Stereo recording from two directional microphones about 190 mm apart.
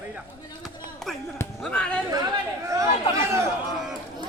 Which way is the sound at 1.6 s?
5° left (ahead or behind).